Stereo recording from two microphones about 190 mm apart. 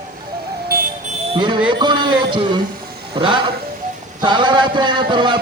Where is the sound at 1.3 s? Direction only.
25° right (ahead or behind).